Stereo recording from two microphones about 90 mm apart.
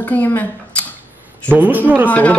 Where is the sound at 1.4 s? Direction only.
20° right (ahead or behind).